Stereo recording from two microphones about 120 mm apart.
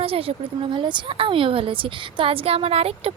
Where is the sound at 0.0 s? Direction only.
50° right (ahead or behind).